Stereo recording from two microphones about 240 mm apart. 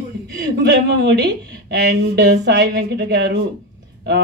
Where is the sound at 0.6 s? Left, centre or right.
Right.